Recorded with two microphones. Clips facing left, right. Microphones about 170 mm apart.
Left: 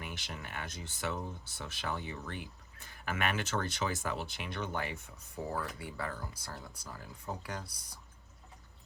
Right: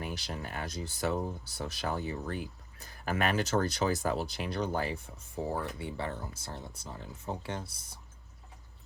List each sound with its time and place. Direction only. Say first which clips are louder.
0.0 s speech: right 6 dB; 35° right (ahead or behind)